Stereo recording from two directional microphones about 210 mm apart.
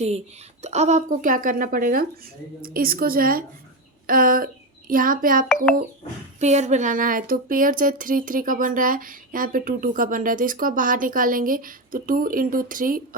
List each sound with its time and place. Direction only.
0.6 s a woman's voice: 30° right (ahead or behind)